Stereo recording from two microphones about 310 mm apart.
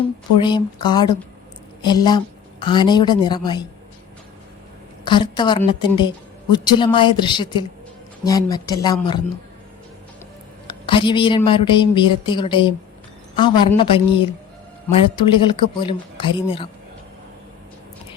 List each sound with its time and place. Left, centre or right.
0.4 s a woman's voice: centre
5.0 s a woman's voice: centre
10.7 s a woman's voice: centre